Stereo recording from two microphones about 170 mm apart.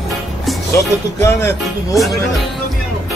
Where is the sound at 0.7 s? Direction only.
15° left (ahead or behind).